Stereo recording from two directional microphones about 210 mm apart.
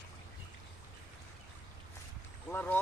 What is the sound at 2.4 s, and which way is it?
Speech, 10° left (ahead or behind).